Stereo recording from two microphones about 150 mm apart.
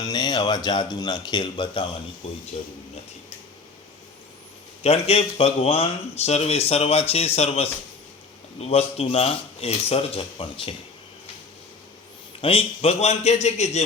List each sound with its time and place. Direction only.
0.0 s speech: 25° left (ahead or behind)
4.8 s speech: 45° left (ahead or behind)
12.4 s speech: 40° left (ahead or behind)